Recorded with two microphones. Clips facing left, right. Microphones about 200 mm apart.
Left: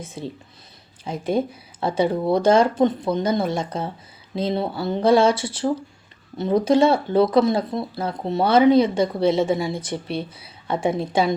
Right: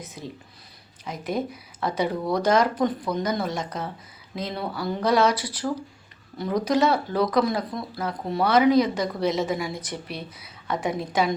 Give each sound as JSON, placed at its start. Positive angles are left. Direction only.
{"t": 0.0, "sound": "speech", "side_deg": 30}